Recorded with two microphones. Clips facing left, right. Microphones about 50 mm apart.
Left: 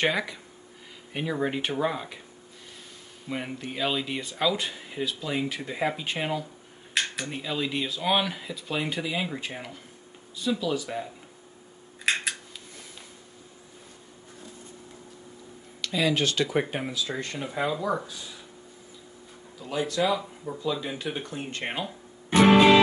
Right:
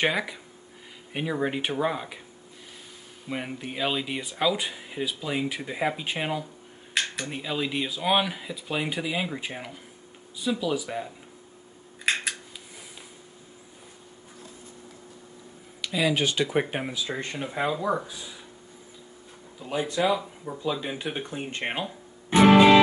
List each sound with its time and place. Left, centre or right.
0.0 s speech: centre
3.3 s speech: centre
12.0 s scissors: centre
15.8 s speech: centre
19.6 s speech: centre
22.3 s music: centre